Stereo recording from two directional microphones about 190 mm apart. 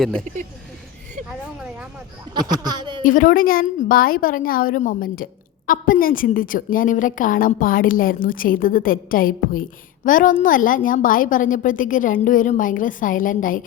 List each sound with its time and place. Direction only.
0.0 s speech: 5° left (ahead or behind)
2.3 s a sound: 20° right (ahead or behind)
3.1 s a woman's voice: 45° left (ahead or behind)